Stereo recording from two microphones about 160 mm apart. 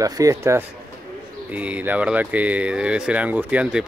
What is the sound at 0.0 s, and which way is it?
Speech, 20° right (ahead or behind).